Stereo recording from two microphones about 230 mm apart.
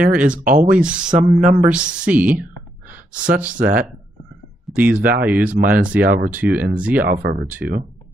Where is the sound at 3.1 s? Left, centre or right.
Right.